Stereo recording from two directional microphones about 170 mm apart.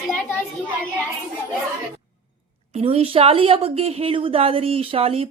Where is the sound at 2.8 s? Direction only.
35° right (ahead or behind).